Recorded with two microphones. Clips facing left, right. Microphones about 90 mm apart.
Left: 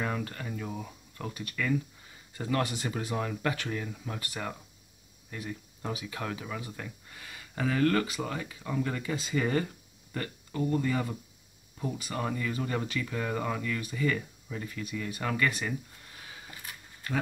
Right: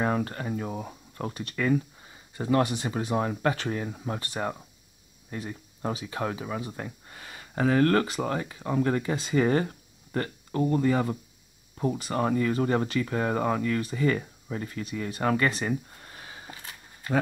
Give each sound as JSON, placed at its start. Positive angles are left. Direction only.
{"t": 0.0, "sound": "speech", "side_deg": -35}
{"t": 2.3, "sound": "speech", "side_deg": -25}